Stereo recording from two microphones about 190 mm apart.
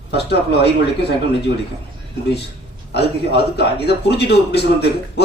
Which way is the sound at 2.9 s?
60° left (ahead or behind).